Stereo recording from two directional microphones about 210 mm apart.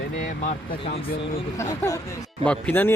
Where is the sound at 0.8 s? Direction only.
25° left (ahead or behind).